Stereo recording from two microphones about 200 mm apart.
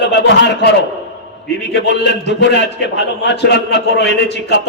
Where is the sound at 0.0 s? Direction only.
60° left (ahead or behind).